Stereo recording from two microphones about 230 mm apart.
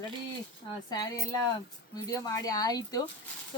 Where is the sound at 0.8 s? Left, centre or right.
Centre.